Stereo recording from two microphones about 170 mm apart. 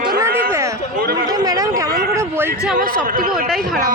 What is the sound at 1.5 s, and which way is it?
A man's voice, 20° right (ahead or behind).